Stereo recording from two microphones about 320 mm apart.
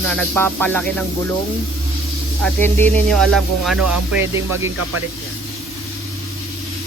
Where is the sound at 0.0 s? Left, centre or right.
Centre.